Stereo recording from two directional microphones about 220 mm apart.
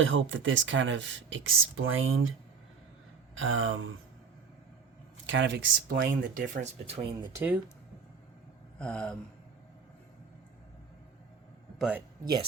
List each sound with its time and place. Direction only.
0.0 s speech: 60° right (ahead or behind)
3.3 s speech: 60° right (ahead or behind)
5.2 s speech: 55° right (ahead or behind); by 7.1 s 30° right (ahead or behind)
7.3 s speech: 5° right (ahead or behind)
8.8 s a sound: 5° left (ahead or behind)
11.8 s a sound: 5° right (ahead or behind)